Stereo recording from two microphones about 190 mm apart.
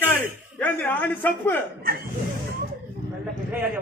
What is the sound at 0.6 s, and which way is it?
Speech, 10° left (ahead or behind).